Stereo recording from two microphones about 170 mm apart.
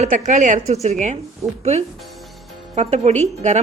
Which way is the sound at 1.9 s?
Centre (ahead or behind).